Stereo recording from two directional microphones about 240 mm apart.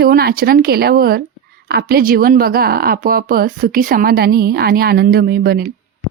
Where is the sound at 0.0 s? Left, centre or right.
Right.